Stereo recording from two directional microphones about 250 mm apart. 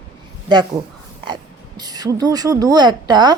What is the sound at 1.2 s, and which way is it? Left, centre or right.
Speech, centre.